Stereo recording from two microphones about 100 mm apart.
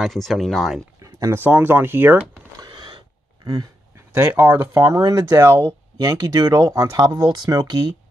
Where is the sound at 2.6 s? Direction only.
50° right (ahead or behind).